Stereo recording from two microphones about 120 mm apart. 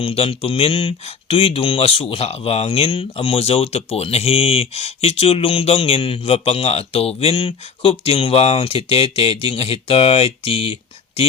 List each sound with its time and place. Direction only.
0.0 s speech: 50° left (ahead or behind)